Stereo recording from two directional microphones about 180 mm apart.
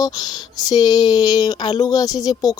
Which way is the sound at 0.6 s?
20° left (ahead or behind).